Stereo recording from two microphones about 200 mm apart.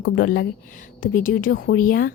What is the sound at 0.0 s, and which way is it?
Speech, 50° left (ahead or behind).